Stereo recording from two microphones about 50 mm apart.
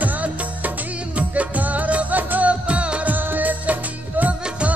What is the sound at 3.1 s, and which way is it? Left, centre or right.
Music, right.